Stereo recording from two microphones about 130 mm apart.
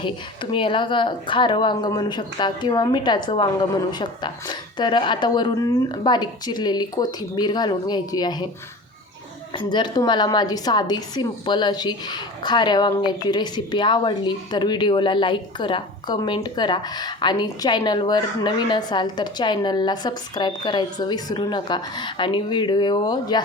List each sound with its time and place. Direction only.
0.5 s a woman's voice: 40° left (ahead or behind)
9.6 s a woman's voice: 35° left (ahead or behind)